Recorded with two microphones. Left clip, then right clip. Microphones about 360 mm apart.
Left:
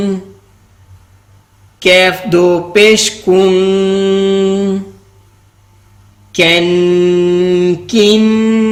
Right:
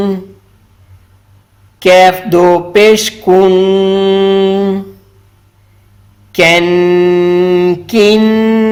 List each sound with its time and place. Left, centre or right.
2.0 s mantra: centre
6.3 s mantra: right